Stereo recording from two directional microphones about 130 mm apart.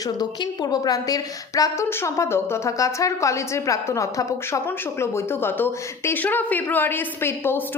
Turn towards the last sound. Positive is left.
turn(degrees=20)  # may be behind; listen again after turning